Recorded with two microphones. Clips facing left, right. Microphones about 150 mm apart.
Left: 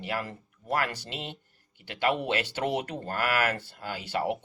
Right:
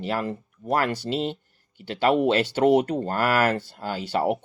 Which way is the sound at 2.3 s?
30° right (ahead or behind).